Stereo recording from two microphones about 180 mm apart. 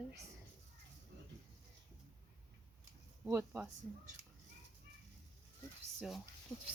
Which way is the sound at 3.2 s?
15° right (ahead or behind).